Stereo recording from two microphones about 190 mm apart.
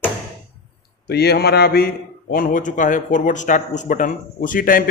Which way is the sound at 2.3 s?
45° left (ahead or behind).